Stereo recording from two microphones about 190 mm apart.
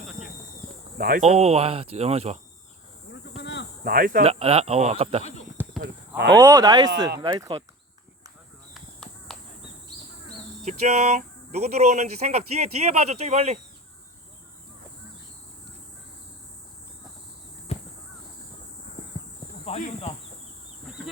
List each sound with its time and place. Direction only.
0.9 s speech: 50° right (ahead or behind)
1.2 s speech: 35° right (ahead or behind)
3.4 s cricket: 65° left (ahead or behind)
3.8 s speech: 50° right (ahead or behind)
4.2 s speech: 30° right (ahead or behind)
5.8 s a sound: 60° right (ahead or behind)
6.3 s speech: 15° right (ahead or behind)
8.7 s a sound: centre (ahead or behind)
10.7 s speech: 35° right (ahead or behind)
17.7 s crow: 30° left (ahead or behind)
19.6 s speech: 35° left (ahead or behind)